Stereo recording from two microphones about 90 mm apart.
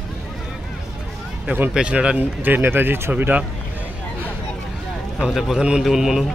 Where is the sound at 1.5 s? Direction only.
15° right (ahead or behind).